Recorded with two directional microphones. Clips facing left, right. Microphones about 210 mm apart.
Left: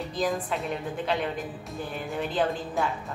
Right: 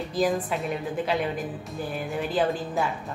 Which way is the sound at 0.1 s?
5° right (ahead or behind).